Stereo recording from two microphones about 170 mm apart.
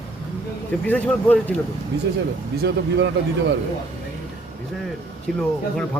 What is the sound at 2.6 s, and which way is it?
Speech, 90° right.